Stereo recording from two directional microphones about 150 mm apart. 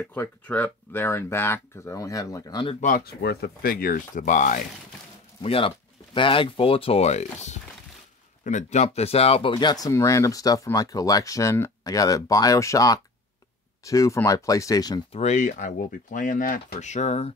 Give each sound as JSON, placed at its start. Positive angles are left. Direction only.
{"t": 0.0, "sound": "speech", "side_deg": 15}
{"t": 2.8, "sound": "speech", "side_deg": 75}
{"t": 5.4, "sound": "speech", "side_deg": 40}
{"t": 15.1, "sound": "speech", "side_deg": 50}